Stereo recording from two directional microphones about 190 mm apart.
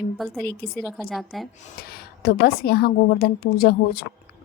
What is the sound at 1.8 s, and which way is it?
A woman's voice, 55° left (ahead or behind).